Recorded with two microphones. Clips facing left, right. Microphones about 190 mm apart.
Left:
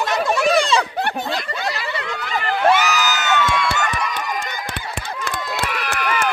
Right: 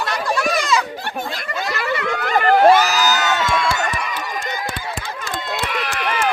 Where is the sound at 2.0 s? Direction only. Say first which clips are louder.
Right 9 dB; 50° right (ahead or behind).